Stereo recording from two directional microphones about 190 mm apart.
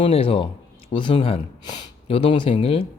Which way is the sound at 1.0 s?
25° left (ahead or behind).